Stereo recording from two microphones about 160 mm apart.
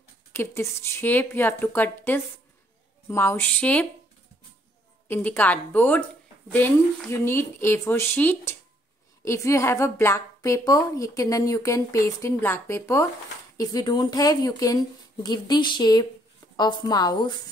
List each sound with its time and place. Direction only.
0.3 s speech: 15° left (ahead or behind)
5.0 s a woman's voice: 10° left (ahead or behind)